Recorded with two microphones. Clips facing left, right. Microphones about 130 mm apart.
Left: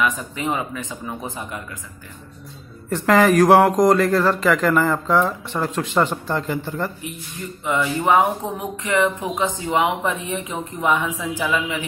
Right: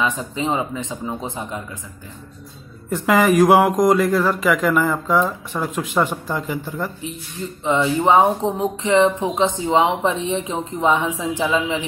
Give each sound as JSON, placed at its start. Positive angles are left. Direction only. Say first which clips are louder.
{"t": 0.2, "sound": "speech", "louder": "right 3 dB", "side_deg": -25}
{"t": 2.9, "sound": "speech", "louder": "left 1 dB", "side_deg": -5}
{"t": 7.6, "sound": "speech", "louder": "right 3 dB", "side_deg": -25}